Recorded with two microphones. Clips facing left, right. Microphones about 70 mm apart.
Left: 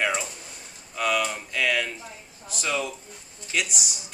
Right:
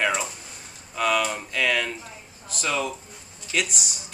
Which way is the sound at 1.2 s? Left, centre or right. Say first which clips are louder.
Right 2 dB; centre.